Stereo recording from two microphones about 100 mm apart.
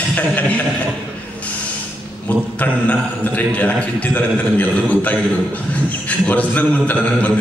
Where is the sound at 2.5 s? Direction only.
15° left (ahead or behind).